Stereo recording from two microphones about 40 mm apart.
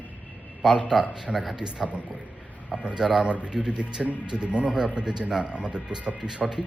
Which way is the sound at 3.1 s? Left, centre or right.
Right.